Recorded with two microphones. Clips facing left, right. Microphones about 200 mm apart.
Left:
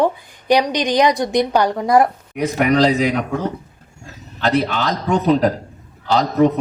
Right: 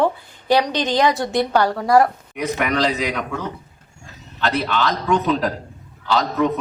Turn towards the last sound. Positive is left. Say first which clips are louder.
# left 4 dB
turn(degrees=45)  # may be behind; listen again after turning